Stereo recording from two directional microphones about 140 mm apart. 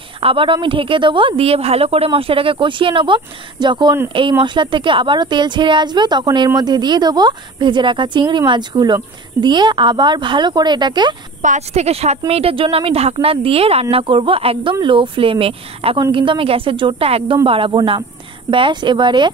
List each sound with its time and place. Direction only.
0.2 s speech: 40° right (ahead or behind)
11.4 s a woman's voice: 55° right (ahead or behind); by 19.3 s 35° right (ahead or behind)